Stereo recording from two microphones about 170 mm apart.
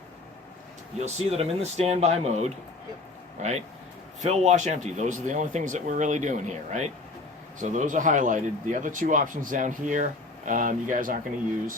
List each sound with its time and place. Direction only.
0.9 s speech: 40° right (ahead or behind)